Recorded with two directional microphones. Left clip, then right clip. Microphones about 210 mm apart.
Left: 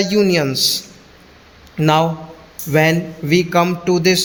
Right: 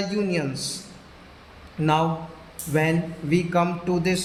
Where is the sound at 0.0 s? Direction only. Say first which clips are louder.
Left 11 dB; 45° left (ahead or behind).